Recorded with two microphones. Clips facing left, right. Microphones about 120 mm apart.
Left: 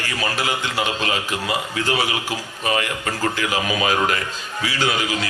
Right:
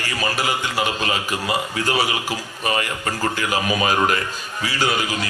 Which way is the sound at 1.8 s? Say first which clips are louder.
Right 1 dB; 40° right (ahead or behind).